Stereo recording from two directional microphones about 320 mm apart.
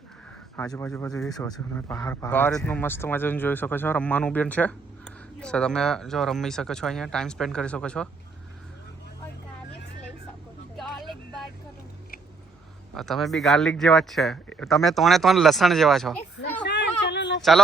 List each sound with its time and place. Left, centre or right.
0.5 s speech: centre
10.8 s vehicle: centre
12.9 s speech: centre
16.6 s a sound: left